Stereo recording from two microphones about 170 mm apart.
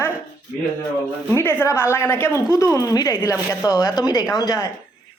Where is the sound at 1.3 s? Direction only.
15° left (ahead or behind).